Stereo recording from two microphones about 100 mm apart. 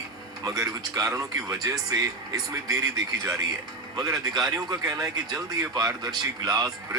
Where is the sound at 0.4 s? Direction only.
35° right (ahead or behind).